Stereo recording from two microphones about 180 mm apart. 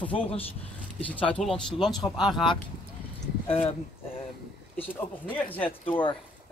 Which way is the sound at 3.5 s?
35° left (ahead or behind).